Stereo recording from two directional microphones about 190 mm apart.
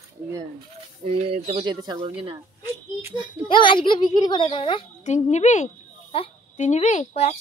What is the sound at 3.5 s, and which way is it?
A child's voice, 25° left (ahead or behind).